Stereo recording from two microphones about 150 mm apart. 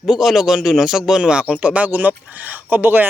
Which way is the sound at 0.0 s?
Centre (ahead or behind).